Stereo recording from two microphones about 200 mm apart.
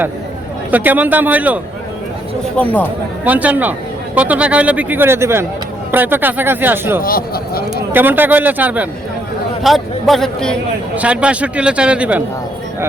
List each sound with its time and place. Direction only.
0.7 s a man's voice: 10° right (ahead or behind)
2.6 s a man's voice: 5° left (ahead or behind)
3.2 s a man's voice: 10° right (ahead or behind)
7.0 s speech: 50° left (ahead or behind)
7.9 s a man's voice: 10° right (ahead or behind)